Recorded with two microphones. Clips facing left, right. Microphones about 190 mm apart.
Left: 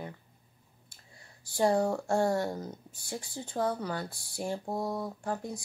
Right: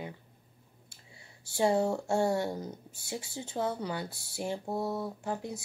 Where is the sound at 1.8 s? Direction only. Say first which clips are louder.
Even; 25° right (ahead or behind).